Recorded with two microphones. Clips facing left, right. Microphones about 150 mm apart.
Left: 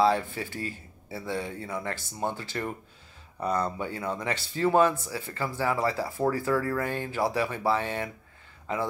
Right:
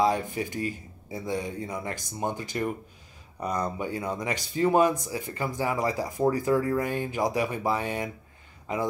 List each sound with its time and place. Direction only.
0.0 s speech: 15° right (ahead or behind)